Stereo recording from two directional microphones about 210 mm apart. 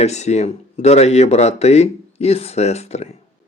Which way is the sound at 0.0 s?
30° left (ahead or behind).